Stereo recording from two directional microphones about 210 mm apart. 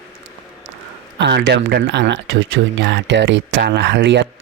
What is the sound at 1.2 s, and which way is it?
Speech, 55° right (ahead or behind).